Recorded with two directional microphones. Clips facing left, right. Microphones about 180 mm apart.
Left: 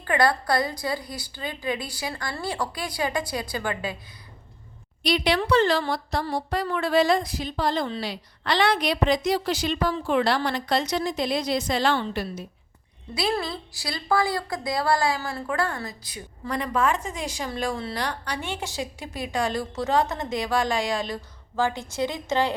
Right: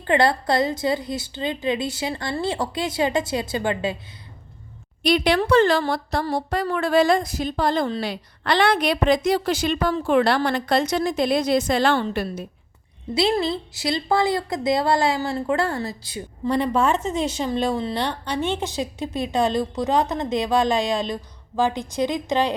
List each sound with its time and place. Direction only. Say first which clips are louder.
0.0 s a woman's voice: right 3 dB; 25° right (ahead or behind)
5.0 s a woman's voice: right 4 dB; 50° right (ahead or behind)
13.1 s a woman's voice: right 6 dB; 25° right (ahead or behind)